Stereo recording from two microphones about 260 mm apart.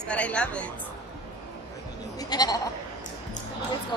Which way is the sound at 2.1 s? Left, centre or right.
Centre.